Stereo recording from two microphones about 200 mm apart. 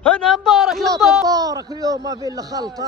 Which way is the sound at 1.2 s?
20° right (ahead or behind).